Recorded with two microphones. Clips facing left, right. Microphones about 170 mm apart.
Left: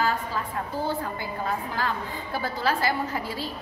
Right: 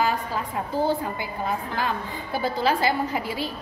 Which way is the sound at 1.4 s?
15° right (ahead or behind).